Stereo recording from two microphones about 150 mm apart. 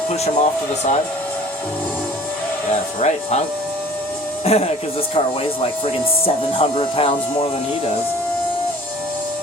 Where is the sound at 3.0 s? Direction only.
45° left (ahead or behind).